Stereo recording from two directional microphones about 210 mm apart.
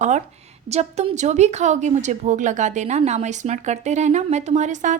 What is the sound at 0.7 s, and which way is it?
A woman's voice, 30° right (ahead or behind).